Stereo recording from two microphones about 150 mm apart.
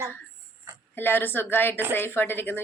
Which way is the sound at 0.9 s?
15° left (ahead or behind).